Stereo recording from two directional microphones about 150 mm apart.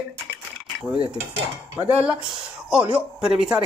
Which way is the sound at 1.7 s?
10° right (ahead or behind).